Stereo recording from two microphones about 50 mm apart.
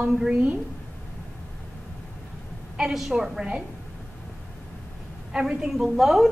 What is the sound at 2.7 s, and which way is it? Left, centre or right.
Speech, centre.